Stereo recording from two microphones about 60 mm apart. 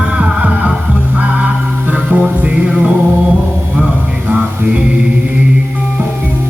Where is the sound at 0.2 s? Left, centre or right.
Right.